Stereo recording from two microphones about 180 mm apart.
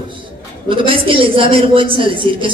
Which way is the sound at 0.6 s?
30° right (ahead or behind).